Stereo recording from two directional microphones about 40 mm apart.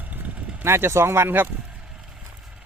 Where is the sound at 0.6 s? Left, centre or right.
Right.